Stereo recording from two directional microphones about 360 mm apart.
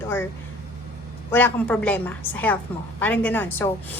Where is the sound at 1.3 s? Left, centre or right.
Centre.